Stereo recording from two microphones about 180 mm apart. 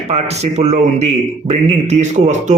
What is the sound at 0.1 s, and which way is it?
Speech, 35° right (ahead or behind).